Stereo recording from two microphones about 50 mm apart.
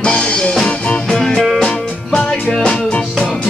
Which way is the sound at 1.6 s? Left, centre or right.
Centre.